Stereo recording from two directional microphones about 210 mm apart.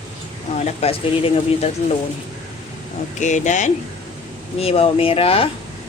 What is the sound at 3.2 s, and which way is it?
Speech, 35° left (ahead or behind).